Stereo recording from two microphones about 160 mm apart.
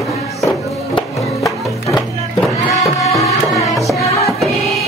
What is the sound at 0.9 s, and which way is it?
Music, 20° left (ahead or behind).